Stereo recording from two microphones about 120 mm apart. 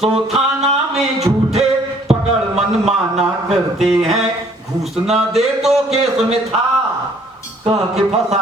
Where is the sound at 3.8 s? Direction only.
Centre (ahead or behind).